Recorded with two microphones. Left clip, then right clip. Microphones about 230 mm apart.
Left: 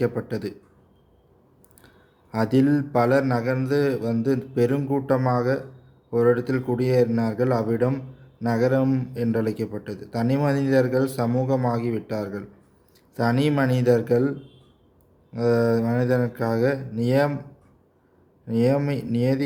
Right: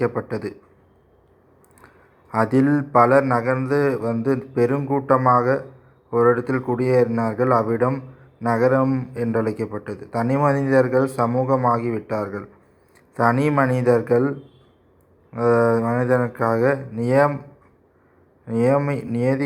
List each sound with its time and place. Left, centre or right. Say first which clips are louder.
0.2 s a man's voice: right 3 dB; left
2.3 s a man's voice: right 3 dB; left
18.4 s a man's voice: right 3 dB; centre